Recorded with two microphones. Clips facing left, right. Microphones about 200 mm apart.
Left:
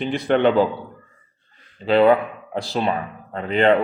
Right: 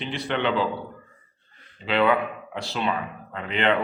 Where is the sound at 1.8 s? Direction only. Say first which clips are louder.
Left 7 dB; 40° left (ahead or behind).